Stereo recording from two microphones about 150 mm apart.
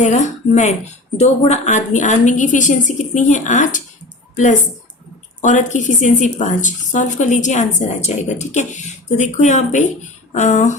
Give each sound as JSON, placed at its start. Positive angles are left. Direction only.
{"t": 0.0, "sound": "speech", "side_deg": 50}
{"t": 5.4, "sound": "a woman's voice", "side_deg": 55}